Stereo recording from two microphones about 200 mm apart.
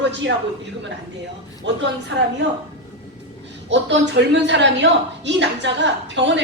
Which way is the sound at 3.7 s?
65° right (ahead or behind).